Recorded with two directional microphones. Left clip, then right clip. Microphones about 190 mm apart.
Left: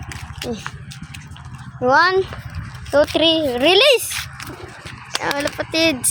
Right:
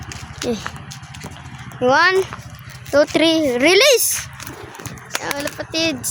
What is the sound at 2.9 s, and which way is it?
A child's voice, 20° right (ahead or behind).